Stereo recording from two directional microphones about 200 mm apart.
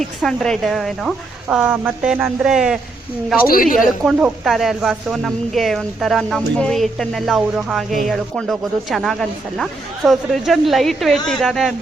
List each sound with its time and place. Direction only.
0.0 s speech: centre (ahead or behind)
3.5 s a woman's voice: 45° left (ahead or behind)
3.8 s speech: centre (ahead or behind)